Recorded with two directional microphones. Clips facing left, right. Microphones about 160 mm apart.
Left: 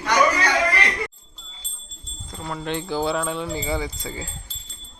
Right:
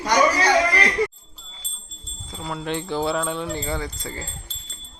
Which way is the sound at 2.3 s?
Centre (ahead or behind).